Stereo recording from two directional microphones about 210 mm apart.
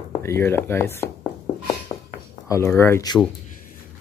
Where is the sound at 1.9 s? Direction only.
25° left (ahead or behind).